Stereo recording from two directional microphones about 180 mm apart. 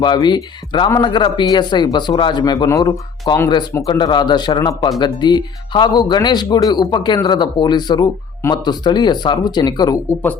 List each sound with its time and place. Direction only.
0.0 s speech: 25° left (ahead or behind)